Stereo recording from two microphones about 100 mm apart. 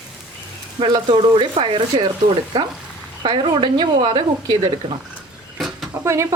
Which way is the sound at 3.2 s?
55° right (ahead or behind).